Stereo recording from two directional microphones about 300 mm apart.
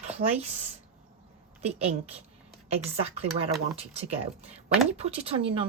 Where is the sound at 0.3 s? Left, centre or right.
Right.